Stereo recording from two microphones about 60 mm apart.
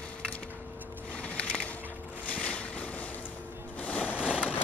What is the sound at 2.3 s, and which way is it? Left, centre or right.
Boat, left.